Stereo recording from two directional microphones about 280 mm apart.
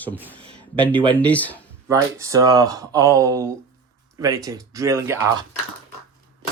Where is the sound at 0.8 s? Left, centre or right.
Centre.